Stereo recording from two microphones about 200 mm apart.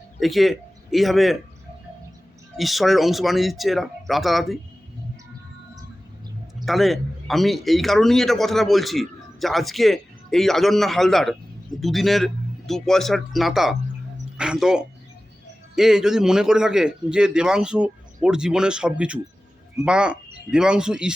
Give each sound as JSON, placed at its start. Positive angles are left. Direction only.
{"t": 0.2, "sound": "a man's voice", "side_deg": 0}
{"t": 2.6, "sound": "a man's voice", "side_deg": 0}
{"t": 6.7, "sound": "a man's voice", "side_deg": 0}